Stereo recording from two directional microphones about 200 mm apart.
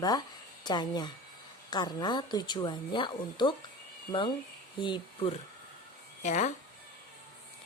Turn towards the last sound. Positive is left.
turn(degrees=35)  # may be behind; listen again after turning